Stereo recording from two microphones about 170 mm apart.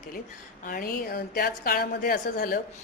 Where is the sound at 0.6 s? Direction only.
60° left (ahead or behind).